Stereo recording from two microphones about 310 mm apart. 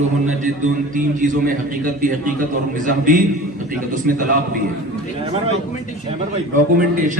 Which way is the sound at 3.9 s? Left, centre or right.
Right.